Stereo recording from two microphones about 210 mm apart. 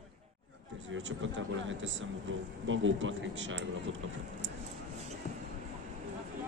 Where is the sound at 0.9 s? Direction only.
65° right (ahead or behind).